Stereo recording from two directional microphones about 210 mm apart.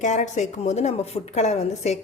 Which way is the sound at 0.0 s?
35° left (ahead or behind).